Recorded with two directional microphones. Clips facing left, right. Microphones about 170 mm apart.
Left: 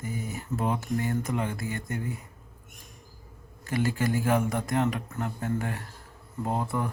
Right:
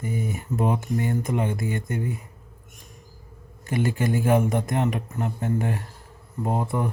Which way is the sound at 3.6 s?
20° right (ahead or behind).